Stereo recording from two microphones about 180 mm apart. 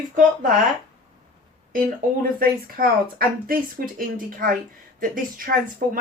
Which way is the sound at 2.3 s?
55° right (ahead or behind).